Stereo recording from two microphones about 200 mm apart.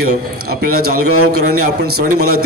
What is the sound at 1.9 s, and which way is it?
Speech, 90° right.